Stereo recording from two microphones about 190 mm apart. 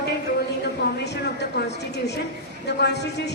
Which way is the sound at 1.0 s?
60° left (ahead or behind).